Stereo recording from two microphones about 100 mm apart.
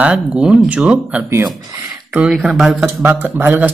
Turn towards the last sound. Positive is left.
turn(degrees=-15)  # may be behind; listen again after turning